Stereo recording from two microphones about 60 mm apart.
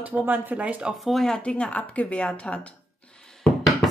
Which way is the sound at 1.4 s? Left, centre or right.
Centre.